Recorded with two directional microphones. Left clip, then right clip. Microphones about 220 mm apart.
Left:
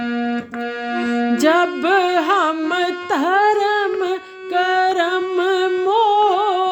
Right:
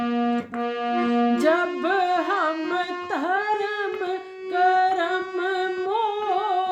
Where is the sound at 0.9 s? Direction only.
15° left (ahead or behind).